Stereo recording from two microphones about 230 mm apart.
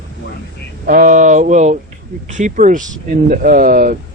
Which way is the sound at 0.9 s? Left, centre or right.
Right.